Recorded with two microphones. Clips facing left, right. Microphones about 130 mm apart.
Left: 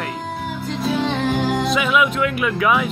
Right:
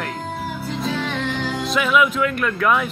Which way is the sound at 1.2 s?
45° left (ahead or behind).